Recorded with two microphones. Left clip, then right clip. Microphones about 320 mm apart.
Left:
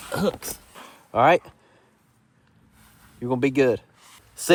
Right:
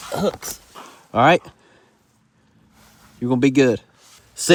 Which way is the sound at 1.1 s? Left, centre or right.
Right.